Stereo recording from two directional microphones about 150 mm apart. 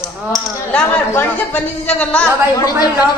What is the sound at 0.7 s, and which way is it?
A woman's voice, 10° left (ahead or behind).